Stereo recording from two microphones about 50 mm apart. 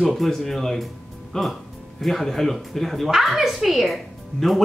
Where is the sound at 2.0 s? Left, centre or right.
Centre.